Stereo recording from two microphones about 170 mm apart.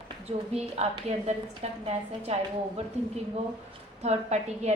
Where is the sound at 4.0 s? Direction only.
40° right (ahead or behind).